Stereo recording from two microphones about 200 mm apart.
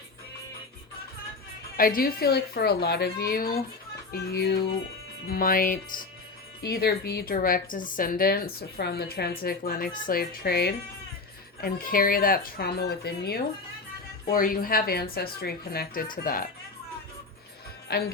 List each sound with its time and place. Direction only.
1.7 s a woman's voice: 45° left (ahead or behind)
17.9 s a woman's voice: 50° left (ahead or behind)